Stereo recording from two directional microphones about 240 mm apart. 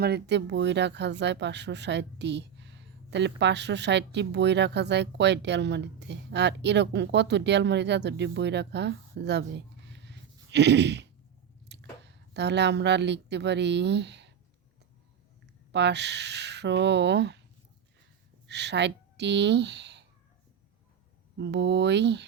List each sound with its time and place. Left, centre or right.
0.0 s speech: right
15.7 s speech: right
18.4 s a woman's voice: right
21.3 s speech: right